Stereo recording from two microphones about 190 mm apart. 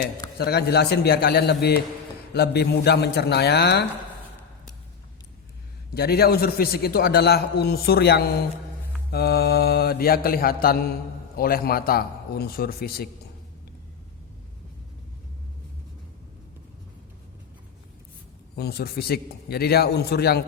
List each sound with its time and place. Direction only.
0.3 s a man's voice: 55° left (ahead or behind)
5.9 s a man's voice: 55° left (ahead or behind)
9.0 s mantra: 55° left (ahead or behind)
18.5 s a man's voice: 55° left (ahead or behind)